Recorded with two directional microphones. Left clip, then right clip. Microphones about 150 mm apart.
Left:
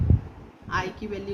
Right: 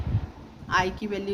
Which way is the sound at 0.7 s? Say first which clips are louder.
Right 4 dB; 50° right (ahead or behind).